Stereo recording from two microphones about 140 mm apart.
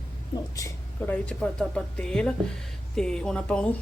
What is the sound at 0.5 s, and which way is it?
A woman's voice, 20° left (ahead or behind).